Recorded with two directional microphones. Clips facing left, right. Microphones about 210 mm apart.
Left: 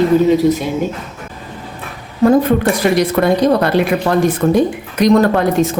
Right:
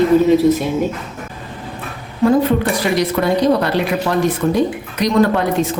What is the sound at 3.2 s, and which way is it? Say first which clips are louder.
Speech: left 2 dB; 50° left (ahead or behind).